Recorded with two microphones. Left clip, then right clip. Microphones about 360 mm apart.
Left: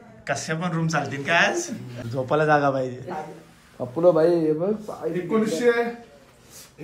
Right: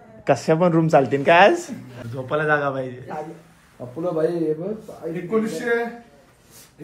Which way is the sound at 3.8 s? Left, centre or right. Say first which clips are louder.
Left 5 dB; centre.